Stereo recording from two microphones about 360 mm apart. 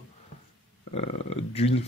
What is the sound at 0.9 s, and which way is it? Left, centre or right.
Speech, centre.